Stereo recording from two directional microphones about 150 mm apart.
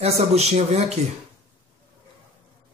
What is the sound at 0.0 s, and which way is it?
Speech, 45° right (ahead or behind).